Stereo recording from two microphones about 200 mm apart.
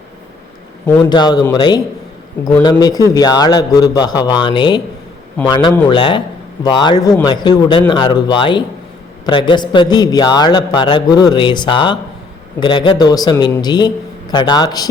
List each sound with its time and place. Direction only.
1.1 s speech: 20° left (ahead or behind)